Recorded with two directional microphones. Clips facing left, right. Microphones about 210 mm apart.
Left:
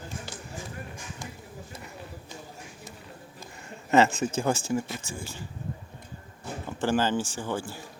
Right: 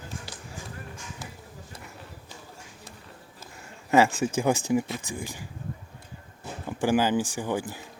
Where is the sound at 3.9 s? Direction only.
10° right (ahead or behind).